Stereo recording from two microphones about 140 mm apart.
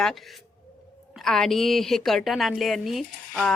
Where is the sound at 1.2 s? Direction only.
5° left (ahead or behind).